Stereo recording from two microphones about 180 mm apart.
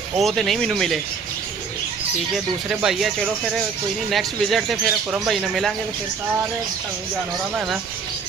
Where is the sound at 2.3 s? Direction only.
5° right (ahead or behind).